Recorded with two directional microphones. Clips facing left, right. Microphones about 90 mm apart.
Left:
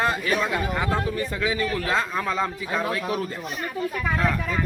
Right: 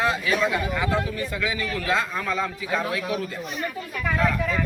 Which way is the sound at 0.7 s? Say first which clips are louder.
Even; 35° left (ahead or behind).